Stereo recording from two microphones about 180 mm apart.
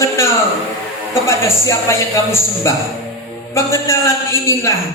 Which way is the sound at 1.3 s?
15° left (ahead or behind).